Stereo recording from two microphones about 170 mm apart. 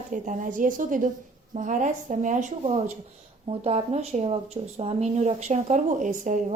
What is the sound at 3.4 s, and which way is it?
A woman's voice, 35° right (ahead or behind).